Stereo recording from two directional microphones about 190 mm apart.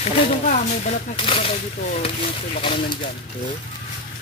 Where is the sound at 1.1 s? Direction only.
30° left (ahead or behind).